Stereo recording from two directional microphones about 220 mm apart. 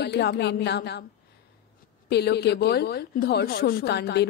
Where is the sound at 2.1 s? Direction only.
45° left (ahead or behind).